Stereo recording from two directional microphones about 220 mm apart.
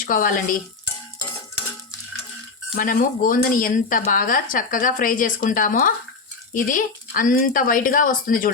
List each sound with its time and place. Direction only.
0.0 s speech: 40° left (ahead or behind)
2.7 s speech: 40° left (ahead or behind)